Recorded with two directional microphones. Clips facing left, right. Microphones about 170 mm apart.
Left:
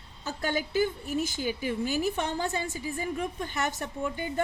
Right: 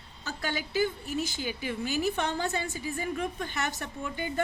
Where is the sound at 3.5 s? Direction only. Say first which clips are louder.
Left 2 dB; 40° left (ahead or behind).